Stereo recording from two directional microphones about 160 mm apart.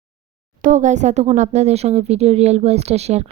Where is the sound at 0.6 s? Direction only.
50° right (ahead or behind).